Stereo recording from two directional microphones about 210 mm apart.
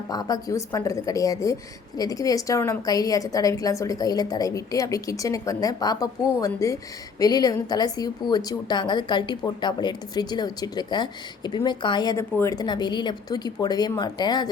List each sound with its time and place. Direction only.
0.1 s a woman's voice: 20° left (ahead or behind)